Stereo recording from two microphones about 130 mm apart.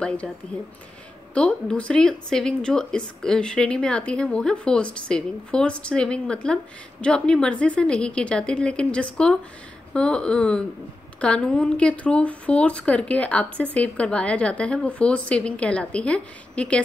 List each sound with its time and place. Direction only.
1.3 s speech: 10° left (ahead or behind)